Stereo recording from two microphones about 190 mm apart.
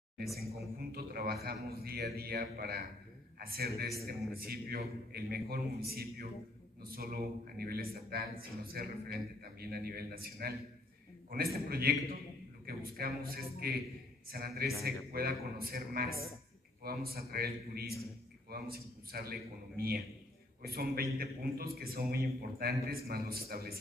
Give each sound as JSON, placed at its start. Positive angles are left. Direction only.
{"t": 0.2, "sound": "a man's voice", "side_deg": 0}
{"t": 0.9, "sound": "a man's voice", "side_deg": -55}